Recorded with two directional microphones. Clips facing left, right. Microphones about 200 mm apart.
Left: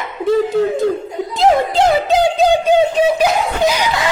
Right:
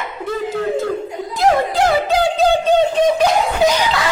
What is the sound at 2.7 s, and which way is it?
Speech, 10° left (ahead or behind).